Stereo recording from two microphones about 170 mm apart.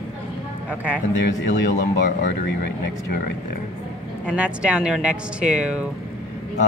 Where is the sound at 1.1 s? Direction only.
90° left.